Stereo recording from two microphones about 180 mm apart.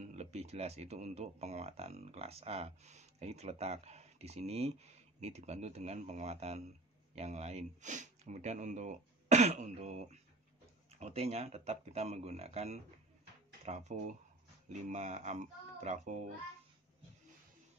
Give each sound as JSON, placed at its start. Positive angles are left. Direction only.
{"t": 0.0, "sound": "speech", "side_deg": -40}